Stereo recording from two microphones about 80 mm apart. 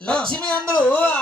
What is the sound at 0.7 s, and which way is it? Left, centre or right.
Speech, centre.